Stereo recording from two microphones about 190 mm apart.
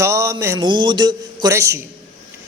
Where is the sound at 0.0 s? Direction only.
15° right (ahead or behind).